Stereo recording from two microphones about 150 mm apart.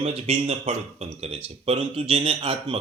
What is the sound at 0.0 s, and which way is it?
A man's voice, 45° right (ahead or behind).